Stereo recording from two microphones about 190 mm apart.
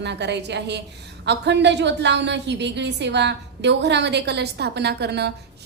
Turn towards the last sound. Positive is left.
turn(degrees=-60)  # may be behind; listen again after turning